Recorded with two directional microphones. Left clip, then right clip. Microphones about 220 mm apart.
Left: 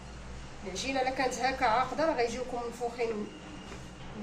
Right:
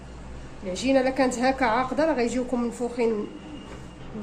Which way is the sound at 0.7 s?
45° right (ahead or behind).